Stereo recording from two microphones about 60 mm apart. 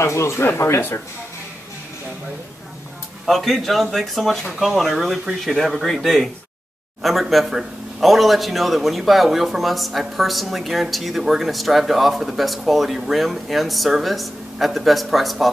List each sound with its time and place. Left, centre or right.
0.0 s speech: left
3.3 s a man's voice: centre